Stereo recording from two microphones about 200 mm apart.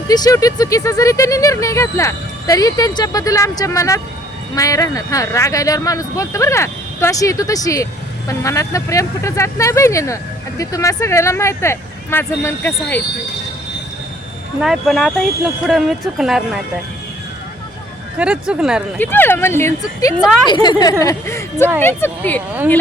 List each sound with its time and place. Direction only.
0.1 s speech: 20° left (ahead or behind)
14.6 s speech: centre (ahead or behind)
18.2 s speech: 5° right (ahead or behind)
18.9 s speech: 10° left (ahead or behind)
20.1 s speech: centre (ahead or behind)
20.5 s speech: 20° left (ahead or behind)